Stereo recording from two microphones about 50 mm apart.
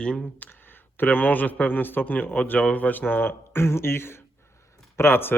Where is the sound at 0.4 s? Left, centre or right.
Left.